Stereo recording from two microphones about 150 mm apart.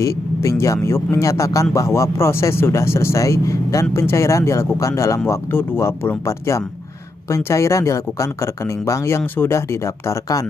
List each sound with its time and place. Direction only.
0.0 s speech: 20° left (ahead or behind)